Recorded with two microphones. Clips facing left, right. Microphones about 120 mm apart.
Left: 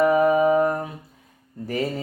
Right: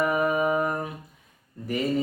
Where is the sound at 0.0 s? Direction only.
30° left (ahead or behind).